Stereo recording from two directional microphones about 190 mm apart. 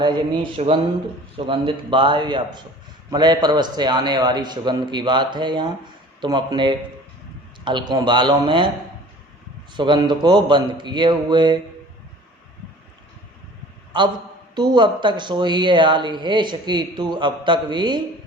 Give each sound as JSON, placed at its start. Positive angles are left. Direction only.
{"t": 0.5, "sound": "speech", "side_deg": -30}
{"t": 9.7, "sound": "speech", "side_deg": -25}
{"t": 13.9, "sound": "speech", "side_deg": -25}